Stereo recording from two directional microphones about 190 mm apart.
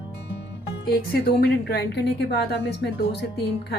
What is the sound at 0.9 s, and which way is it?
Speech, 55° left (ahead or behind).